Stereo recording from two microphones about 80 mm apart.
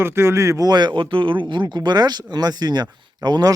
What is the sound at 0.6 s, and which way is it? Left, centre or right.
Speech, right.